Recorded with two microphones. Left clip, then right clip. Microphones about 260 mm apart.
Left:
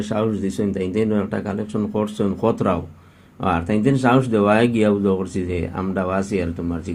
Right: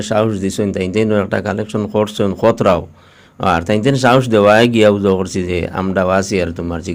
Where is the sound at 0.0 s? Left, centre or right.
Right.